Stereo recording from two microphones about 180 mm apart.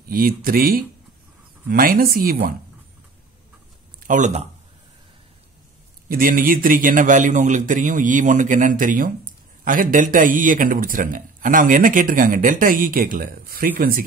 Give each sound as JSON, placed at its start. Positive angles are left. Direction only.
{"t": 0.1, "sound": "a man's voice", "side_deg": -55}
{"t": 4.1, "sound": "speech", "side_deg": -40}
{"t": 6.0, "sound": "a man's voice", "side_deg": -50}